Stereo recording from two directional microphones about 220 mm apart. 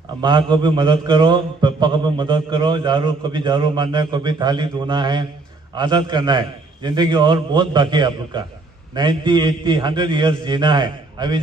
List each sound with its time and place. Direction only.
0.2 s a man's voice: 20° right (ahead or behind)